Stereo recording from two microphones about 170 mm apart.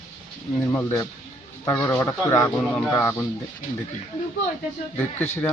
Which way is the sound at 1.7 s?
15° left (ahead or behind).